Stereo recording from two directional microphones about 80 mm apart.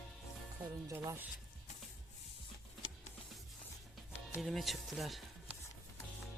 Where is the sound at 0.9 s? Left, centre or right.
Right.